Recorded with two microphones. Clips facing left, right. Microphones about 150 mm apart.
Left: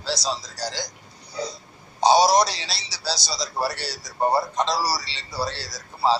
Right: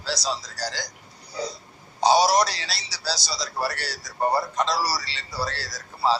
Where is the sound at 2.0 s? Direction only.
25° left (ahead or behind).